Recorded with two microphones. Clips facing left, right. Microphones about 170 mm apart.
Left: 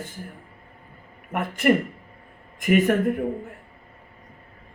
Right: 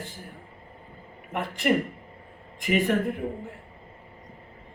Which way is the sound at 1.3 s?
55° left (ahead or behind).